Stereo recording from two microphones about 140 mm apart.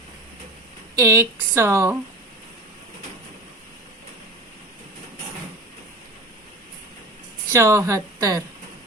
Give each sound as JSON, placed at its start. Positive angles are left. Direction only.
{"t": 0.9, "sound": "speech", "side_deg": -20}
{"t": 7.5, "sound": "speech", "side_deg": -20}